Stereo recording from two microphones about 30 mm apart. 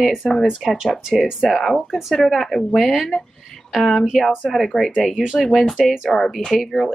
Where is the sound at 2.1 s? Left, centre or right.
Centre.